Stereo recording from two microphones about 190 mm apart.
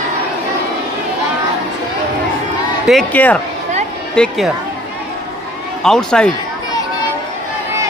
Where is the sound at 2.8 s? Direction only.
5° left (ahead or behind).